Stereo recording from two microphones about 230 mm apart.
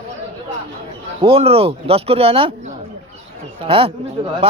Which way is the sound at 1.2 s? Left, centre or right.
Right.